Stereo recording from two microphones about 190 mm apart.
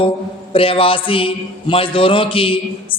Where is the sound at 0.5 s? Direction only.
30° left (ahead or behind).